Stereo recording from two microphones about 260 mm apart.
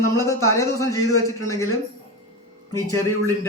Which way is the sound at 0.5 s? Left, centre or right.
Centre.